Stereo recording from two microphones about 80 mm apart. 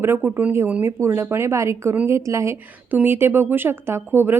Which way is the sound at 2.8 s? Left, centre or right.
Right.